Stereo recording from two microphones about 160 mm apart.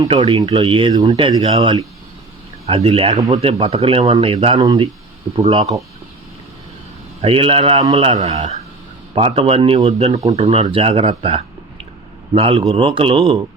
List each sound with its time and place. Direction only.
0.2 s speech: 35° right (ahead or behind)
2.6 s speech: 40° right (ahead or behind)
4.6 s speech: 25° right (ahead or behind)
5.4 s speech: 40° right (ahead or behind)
7.2 s speech: 35° right (ahead or behind)
9.1 s speech: 35° right (ahead or behind)